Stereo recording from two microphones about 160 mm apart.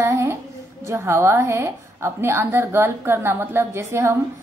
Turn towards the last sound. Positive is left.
turn(degrees=-15)  # may be behind; listen again after turning